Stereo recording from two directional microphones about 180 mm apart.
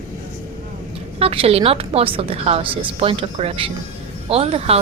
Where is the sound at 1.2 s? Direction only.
35° right (ahead or behind).